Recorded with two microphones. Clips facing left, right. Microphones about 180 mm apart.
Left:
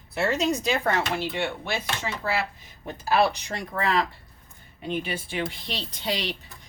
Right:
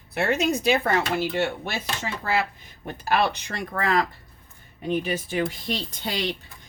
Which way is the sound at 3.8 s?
50° right (ahead or behind).